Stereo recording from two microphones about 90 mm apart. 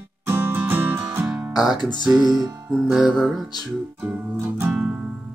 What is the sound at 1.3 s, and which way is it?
Music, centre (ahead or behind).